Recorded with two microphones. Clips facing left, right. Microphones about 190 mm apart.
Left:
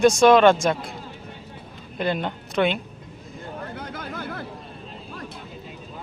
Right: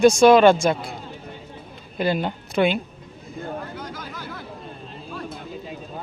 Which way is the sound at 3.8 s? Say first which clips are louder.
Left 2 dB; 60° left (ahead or behind).